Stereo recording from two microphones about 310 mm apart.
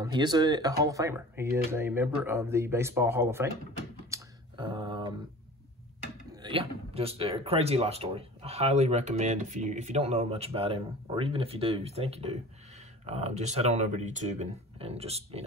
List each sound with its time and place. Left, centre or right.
0.0 s speech: centre
4.1 s a sound: centre
6.4 s speech: centre